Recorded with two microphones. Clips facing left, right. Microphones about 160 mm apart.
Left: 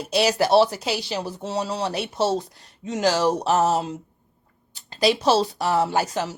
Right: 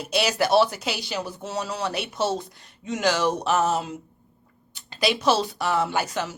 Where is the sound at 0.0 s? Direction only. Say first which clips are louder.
Left 3 dB; 35° left (ahead or behind).